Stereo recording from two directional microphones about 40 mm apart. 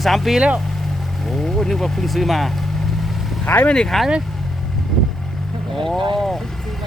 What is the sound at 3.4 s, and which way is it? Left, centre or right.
Speech, left.